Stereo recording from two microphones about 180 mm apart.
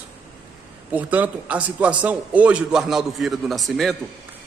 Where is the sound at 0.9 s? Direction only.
10° right (ahead or behind).